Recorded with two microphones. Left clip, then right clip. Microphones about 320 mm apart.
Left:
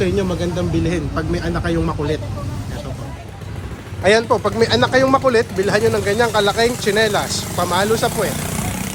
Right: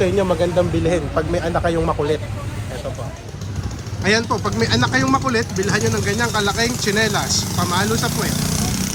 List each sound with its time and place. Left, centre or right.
0.0 s speech: centre
4.0 s speech: centre